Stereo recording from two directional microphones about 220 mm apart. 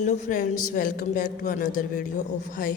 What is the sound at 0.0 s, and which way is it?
A woman's voice, 35° left (ahead or behind).